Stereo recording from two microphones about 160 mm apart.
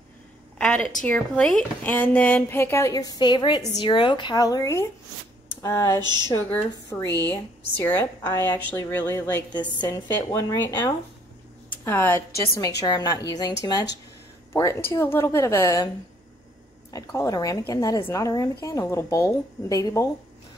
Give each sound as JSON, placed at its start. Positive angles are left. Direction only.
{"t": 0.6, "sound": "a sound", "side_deg": 5}
{"t": 1.0, "sound": "a woman's voice", "side_deg": 5}
{"t": 16.9, "sound": "speech", "side_deg": 20}